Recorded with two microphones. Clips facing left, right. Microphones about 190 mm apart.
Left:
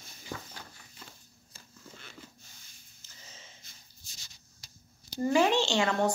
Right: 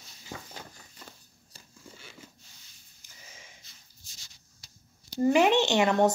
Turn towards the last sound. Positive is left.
turn(degrees=-20)  # may be behind; listen again after turning